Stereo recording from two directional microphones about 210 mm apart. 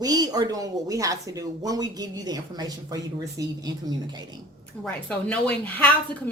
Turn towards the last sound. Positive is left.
turn(degrees=5)  # may be behind; listen again after turning